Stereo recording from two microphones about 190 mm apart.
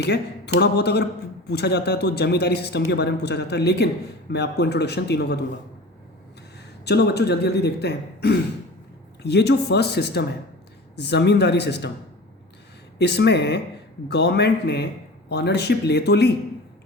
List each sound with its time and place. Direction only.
0.0 s speech: 60° left (ahead or behind)
6.8 s speech: 60° left (ahead or behind)
13.0 s speech: 60° left (ahead or behind)